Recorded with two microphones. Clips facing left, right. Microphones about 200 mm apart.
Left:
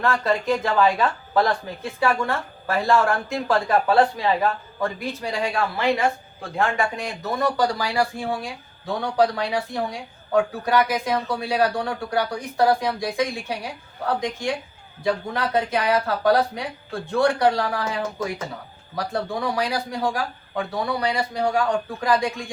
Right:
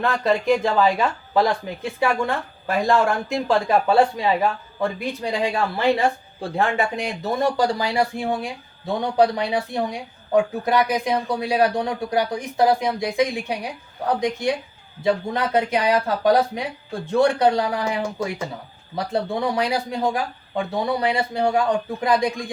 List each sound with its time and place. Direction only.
0.0 s speech: 15° right (ahead or behind)
5.8 s speech: 30° right (ahead or behind)
6.7 s speech: 15° right (ahead or behind)
7.2 s speech: 30° right (ahead or behind)